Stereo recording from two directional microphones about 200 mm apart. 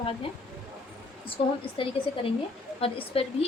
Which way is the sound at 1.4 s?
30° left (ahead or behind).